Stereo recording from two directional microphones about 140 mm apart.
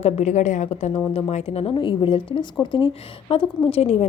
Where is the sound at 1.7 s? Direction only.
35° left (ahead or behind).